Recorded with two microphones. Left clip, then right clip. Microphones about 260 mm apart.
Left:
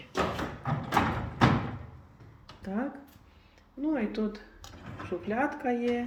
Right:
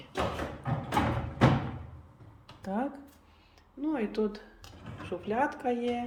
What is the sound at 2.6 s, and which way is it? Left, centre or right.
Speech, centre.